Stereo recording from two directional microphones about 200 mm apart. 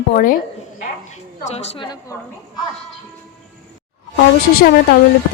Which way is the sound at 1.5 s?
30° left (ahead or behind).